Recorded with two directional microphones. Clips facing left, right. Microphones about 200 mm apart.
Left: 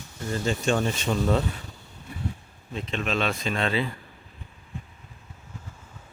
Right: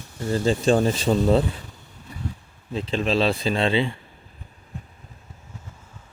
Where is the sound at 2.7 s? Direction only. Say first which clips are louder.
Right 6 dB; 30° right (ahead or behind).